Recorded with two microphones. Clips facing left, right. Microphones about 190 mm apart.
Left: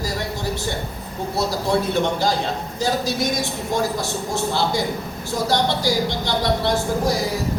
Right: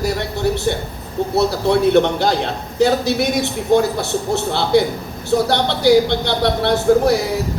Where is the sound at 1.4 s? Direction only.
65° right (ahead or behind).